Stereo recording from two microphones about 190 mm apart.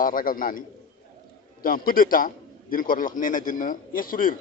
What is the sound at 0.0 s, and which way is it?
Speech, 45° left (ahead or behind).